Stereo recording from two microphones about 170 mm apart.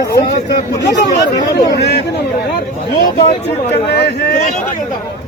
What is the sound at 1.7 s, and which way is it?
Speech, 80° left.